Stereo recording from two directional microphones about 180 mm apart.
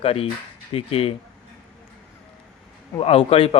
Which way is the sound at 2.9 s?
30° left (ahead or behind).